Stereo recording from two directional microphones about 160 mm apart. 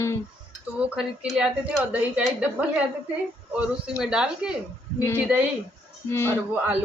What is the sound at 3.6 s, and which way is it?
A woman's voice, 5° right (ahead or behind).